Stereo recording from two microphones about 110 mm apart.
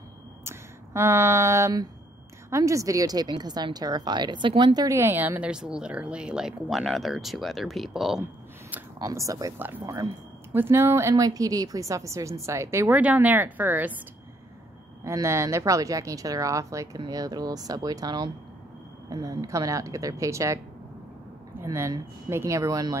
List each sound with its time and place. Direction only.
0.5 s a woman's voice: 20° right (ahead or behind); by 4.7 s 50° right (ahead or behind)
4.7 s a woman's voice: 25° right (ahead or behind); by 8.2 s centre (ahead or behind)
8.2 s speech: 15° right (ahead or behind)
9.0 s a woman's voice: 30° right (ahead or behind)
9.6 s a woman's voice: 20° right (ahead or behind)
15.0 s a woman's voice: 25° right (ahead or behind)